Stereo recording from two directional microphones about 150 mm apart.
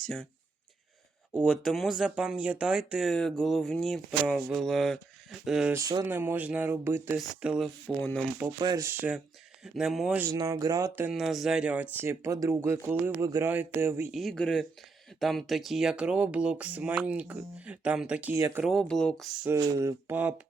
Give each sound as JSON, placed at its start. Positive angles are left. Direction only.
{"t": 0.0, "sound": "speech", "side_deg": 5}
{"t": 1.3, "sound": "speech", "side_deg": -5}
{"t": 5.7, "sound": "speech", "side_deg": -25}
{"t": 6.1, "sound": "speech", "side_deg": -15}
{"t": 7.2, "sound": "speech", "side_deg": -5}
{"t": 7.9, "sound": "speech", "side_deg": 10}
{"t": 8.5, "sound": "speech", "side_deg": -25}
{"t": 10.2, "sound": "speech", "side_deg": -20}
{"t": 11.1, "sound": "speech", "side_deg": 0}
{"t": 14.1, "sound": "speech", "side_deg": 0}
{"t": 18.3, "sound": "speech", "side_deg": -20}
{"t": 18.6, "sound": "speech", "side_deg": 0}
{"t": 19.5, "sound": "speech", "side_deg": -20}
{"t": 20.1, "sound": "speech", "side_deg": -10}